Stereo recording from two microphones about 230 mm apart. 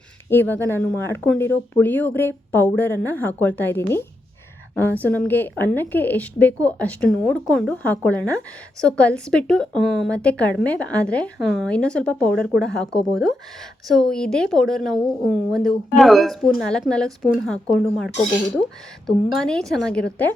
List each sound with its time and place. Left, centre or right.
0.3 s a woman's voice: centre